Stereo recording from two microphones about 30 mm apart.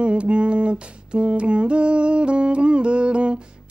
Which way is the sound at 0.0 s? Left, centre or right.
Right.